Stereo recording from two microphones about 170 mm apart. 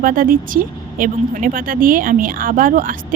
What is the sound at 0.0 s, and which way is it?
Speech, 55° right (ahead or behind).